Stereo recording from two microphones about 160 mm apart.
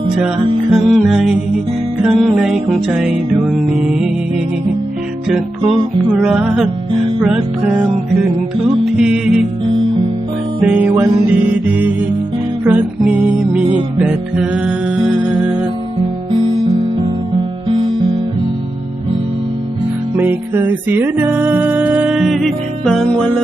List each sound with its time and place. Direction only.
0.7 s music: centre (ahead or behind)
6.1 s music: 5° right (ahead or behind)
10.6 s music: 10° right (ahead or behind)
17.7 s music: 30° right (ahead or behind)
20.1 s music: 15° right (ahead or behind); by 23.3 s 5° left (ahead or behind)